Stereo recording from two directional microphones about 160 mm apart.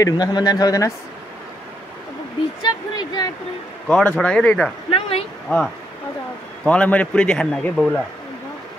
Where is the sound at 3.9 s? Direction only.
5° left (ahead or behind).